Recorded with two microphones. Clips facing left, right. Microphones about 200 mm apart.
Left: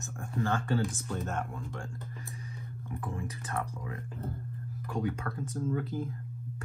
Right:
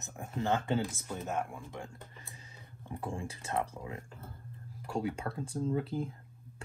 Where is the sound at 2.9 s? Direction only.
30° right (ahead or behind).